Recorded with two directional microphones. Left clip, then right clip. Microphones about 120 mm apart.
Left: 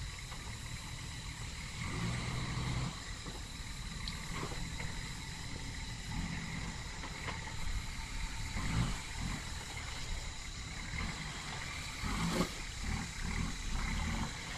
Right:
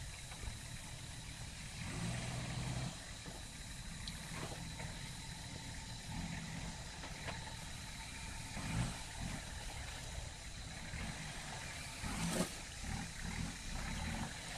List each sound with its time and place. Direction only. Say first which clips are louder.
1.9 s vehicle: left 4 dB; 30° right (ahead or behind)
8.5 s vehicle: left 4 dB; 30° right (ahead or behind)
12.2 s vehicle: left 4 dB; 40° right (ahead or behind)
12.9 s a sound: left 5 dB; 25° right (ahead or behind)